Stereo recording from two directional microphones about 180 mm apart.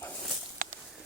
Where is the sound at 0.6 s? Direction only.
50° right (ahead or behind).